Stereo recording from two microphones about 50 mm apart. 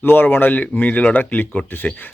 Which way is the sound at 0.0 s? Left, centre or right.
Left.